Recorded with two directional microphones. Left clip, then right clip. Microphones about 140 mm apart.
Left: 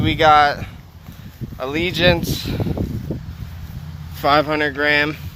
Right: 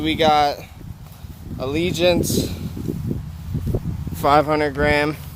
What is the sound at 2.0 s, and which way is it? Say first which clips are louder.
Speech: left 2 dB; 20° right (ahead or behind).